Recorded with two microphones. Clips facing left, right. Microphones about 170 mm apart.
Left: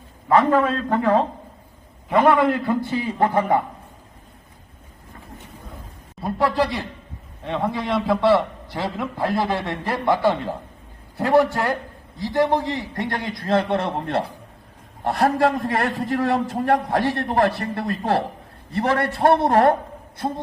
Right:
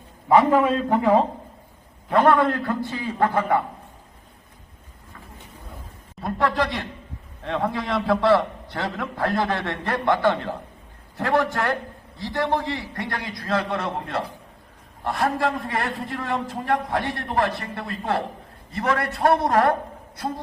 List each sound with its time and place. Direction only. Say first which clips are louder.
0.3 s a man's voice: even; 10° right (ahead or behind)
2.0 s a man's voice: left 1 dB; 5° left (ahead or behind)
6.2 s a man's voice: left 2 dB; 10° left (ahead or behind)
12.7 s a man's voice: left 3 dB; 20° left (ahead or behind)